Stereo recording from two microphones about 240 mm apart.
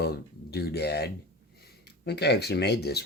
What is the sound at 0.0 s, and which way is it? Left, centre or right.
Speech, left.